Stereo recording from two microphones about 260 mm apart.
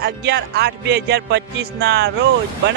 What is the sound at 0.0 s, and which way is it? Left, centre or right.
A man's voice, right.